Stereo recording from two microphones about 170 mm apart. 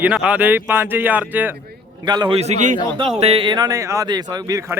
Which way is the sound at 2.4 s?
45° right (ahead or behind).